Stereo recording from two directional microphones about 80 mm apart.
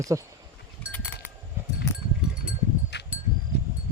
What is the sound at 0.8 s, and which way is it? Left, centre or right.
Goat, centre.